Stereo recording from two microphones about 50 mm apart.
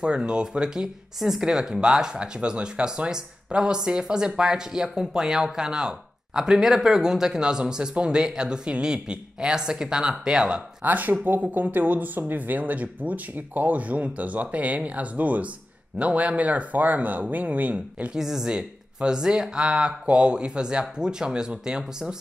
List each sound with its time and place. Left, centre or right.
0.0 s speech: centre
10.8 s speech: right
18.1 s speech: centre